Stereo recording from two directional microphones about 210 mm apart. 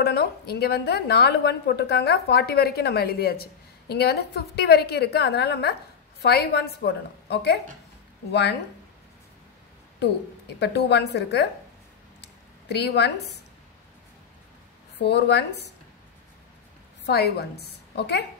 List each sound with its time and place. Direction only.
0.0 s a woman's voice: 50° left (ahead or behind)
9.9 s a woman's voice: 55° left (ahead or behind)
12.2 s a sound: 50° left (ahead or behind)
15.0 s a woman's voice: 55° left (ahead or behind)
17.0 s a woman's voice: 50° left (ahead or behind)